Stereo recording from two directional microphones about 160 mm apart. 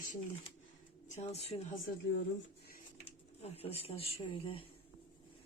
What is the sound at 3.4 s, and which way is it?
Speech, 40° left (ahead or behind).